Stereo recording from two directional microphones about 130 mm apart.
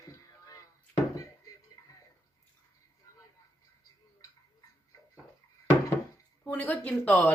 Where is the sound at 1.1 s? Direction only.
30° left (ahead or behind).